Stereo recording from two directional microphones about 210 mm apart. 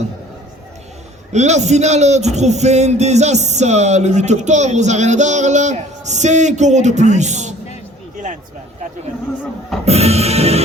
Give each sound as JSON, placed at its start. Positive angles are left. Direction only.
{"t": 1.3, "sound": "speech", "side_deg": -35}
{"t": 8.1, "sound": "a sound", "side_deg": -35}
{"t": 9.8, "sound": "music", "side_deg": -30}